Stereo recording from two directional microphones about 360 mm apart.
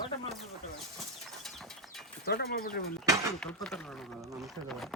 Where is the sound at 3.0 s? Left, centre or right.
Centre.